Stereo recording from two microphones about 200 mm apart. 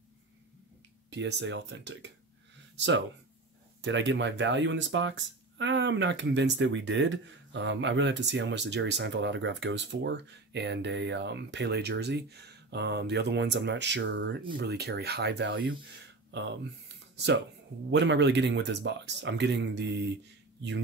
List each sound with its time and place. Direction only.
1.1 s speech: 60° right (ahead or behind)
17.9 s speech: 60° right (ahead or behind)